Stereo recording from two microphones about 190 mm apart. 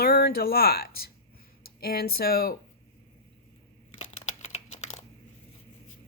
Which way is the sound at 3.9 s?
35° left (ahead or behind).